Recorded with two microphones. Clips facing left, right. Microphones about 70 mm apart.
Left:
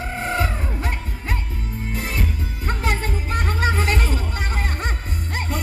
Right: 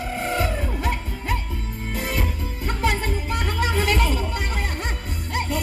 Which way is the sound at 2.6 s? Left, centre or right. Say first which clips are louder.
Right 1 dB; left.